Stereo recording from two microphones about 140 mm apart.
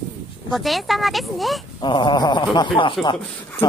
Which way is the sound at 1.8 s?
35° left (ahead or behind).